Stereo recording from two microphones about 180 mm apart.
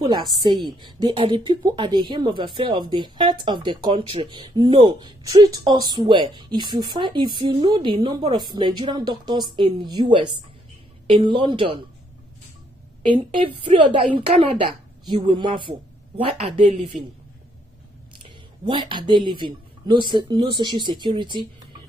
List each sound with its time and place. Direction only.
0.0 s speech: 25° right (ahead or behind)
13.0 s a woman's voice: 30° right (ahead or behind)
18.7 s speech: 25° right (ahead or behind)